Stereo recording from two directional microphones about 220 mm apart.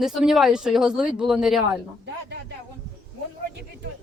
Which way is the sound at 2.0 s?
50° right (ahead or behind).